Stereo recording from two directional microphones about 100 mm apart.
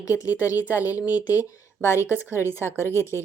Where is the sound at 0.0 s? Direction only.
35° left (ahead or behind).